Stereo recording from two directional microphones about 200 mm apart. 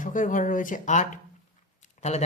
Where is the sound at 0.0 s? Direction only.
40° left (ahead or behind).